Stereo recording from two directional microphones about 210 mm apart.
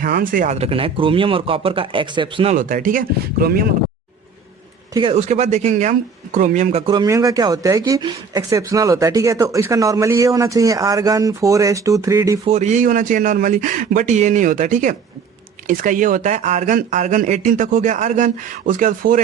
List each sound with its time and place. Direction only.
0.0 s speech: 40° right (ahead or behind); by 2.6 s 25° right (ahead or behind)
2.6 s speech: 40° right (ahead or behind)
4.9 s speech: 25° right (ahead or behind)
12.5 s speech: 35° right (ahead or behind)